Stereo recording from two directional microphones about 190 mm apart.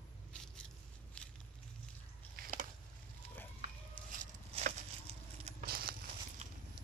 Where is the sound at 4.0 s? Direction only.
5° left (ahead or behind).